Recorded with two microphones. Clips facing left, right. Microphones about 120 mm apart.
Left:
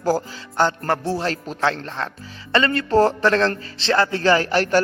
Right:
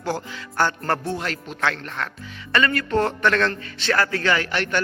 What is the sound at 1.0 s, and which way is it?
Speech, 35° left (ahead or behind).